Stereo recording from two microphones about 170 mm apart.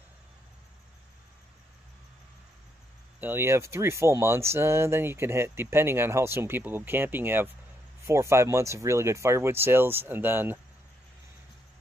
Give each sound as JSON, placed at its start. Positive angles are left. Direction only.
{"t": 3.2, "sound": "speech", "side_deg": -10}